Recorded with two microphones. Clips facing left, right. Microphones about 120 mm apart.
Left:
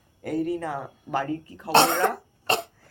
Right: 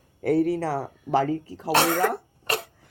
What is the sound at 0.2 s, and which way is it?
Speech, 75° right (ahead or behind).